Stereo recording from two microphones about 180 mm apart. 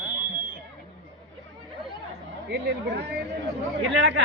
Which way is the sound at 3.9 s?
90° right.